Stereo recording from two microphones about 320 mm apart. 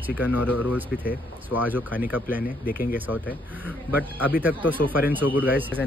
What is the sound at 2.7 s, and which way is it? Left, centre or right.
Speech, left.